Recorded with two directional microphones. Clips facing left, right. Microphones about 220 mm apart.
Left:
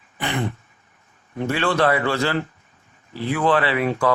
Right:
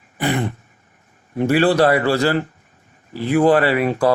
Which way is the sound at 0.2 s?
40° right (ahead or behind).